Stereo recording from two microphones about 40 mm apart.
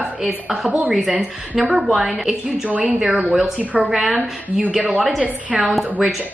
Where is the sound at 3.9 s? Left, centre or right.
Centre.